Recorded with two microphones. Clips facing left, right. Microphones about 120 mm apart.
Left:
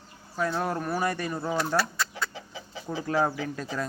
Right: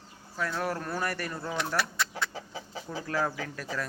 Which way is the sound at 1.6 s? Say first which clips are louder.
Left 3 dB; centre (ahead or behind).